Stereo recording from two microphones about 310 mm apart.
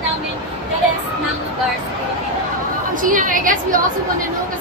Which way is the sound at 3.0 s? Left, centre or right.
Right.